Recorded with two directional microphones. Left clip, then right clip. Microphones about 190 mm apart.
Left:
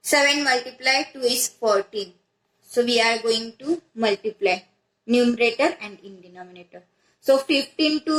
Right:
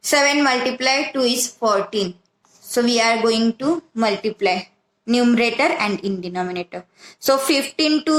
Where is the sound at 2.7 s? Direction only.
45° right (ahead or behind).